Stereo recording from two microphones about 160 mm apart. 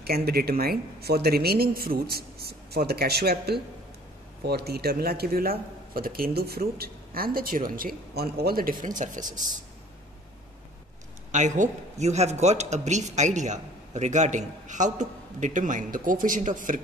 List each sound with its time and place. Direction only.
0.0 s a man's voice: 75° right (ahead or behind); by 9.4 s 55° right (ahead or behind)
11.3 s a man's voice: 50° right (ahead or behind)